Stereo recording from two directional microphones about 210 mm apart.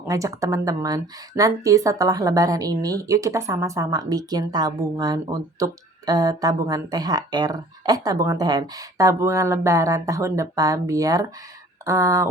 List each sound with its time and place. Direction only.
0.1 s speech: 15° right (ahead or behind)